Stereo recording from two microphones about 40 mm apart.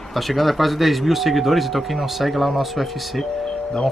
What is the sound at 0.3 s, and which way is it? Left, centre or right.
Speech, centre.